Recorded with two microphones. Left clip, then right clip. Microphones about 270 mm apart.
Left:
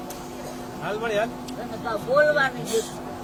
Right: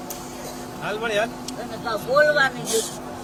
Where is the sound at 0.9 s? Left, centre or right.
Centre.